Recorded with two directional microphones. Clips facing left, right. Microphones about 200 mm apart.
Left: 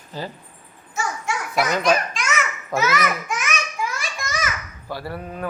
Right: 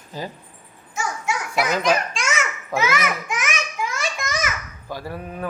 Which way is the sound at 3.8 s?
20° right (ahead or behind).